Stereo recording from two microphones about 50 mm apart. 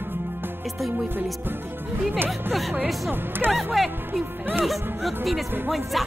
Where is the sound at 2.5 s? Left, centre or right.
Centre.